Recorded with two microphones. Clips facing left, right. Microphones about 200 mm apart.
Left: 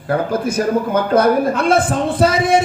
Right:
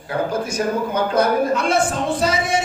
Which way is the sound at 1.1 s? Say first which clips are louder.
Left 4 dB; 55° left (ahead or behind).